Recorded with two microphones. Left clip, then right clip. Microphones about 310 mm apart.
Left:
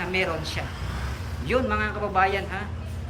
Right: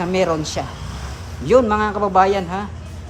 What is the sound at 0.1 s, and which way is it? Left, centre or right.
A woman's voice, centre.